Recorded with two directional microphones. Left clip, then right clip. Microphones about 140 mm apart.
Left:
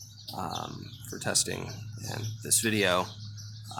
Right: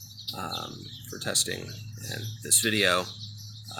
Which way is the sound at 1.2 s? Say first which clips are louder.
Right 1 dB; 45° left (ahead or behind).